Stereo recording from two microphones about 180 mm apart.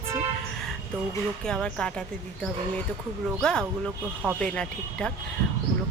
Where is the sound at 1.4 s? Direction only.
5° left (ahead or behind).